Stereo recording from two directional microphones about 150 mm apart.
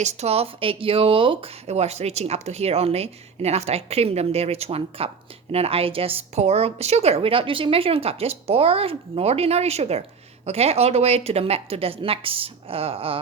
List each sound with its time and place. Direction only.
0.0 s a woman's voice: 45° right (ahead or behind)